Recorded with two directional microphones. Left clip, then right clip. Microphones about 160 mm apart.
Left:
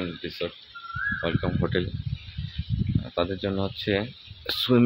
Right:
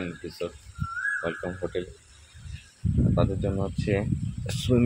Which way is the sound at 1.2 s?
30° left (ahead or behind).